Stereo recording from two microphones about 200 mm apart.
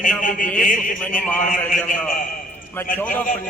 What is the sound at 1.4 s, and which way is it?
Speech, 40° left (ahead or behind).